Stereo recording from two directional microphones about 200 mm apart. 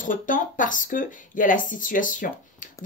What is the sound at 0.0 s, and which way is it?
A woman's voice, 40° left (ahead or behind).